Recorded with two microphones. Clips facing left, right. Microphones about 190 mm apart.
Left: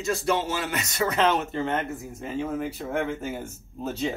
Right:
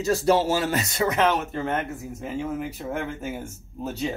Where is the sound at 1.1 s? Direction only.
10° right (ahead or behind).